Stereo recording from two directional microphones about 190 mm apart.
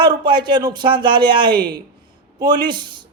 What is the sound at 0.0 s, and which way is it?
A man's voice, 25° right (ahead or behind).